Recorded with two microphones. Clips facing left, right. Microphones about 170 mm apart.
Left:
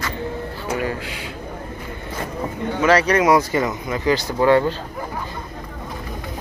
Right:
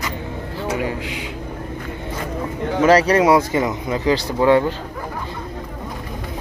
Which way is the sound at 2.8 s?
35° right (ahead or behind).